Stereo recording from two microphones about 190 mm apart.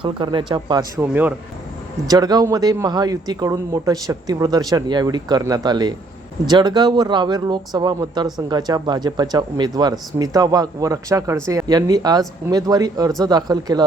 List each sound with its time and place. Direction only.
0.0 s speech: 25° right (ahead or behind)
0.9 s speech: 10° right (ahead or behind)
2.0 s speech: 20° right (ahead or behind)